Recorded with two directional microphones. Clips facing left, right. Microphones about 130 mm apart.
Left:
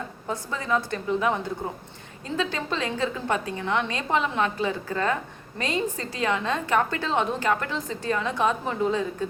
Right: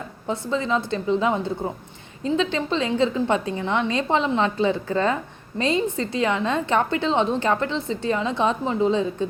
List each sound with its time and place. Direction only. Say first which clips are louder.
0.3 s a woman's voice: right 4 dB; 25° right (ahead or behind)